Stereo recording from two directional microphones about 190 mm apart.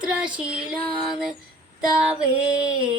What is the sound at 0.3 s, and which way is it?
Female singing, 5° right (ahead or behind).